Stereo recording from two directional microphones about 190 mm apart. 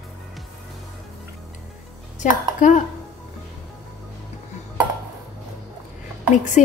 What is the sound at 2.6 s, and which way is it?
Speech, 45° left (ahead or behind).